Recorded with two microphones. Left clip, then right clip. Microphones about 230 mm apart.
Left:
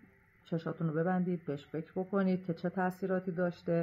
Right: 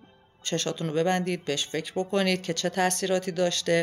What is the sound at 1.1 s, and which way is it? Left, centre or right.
Speech, right.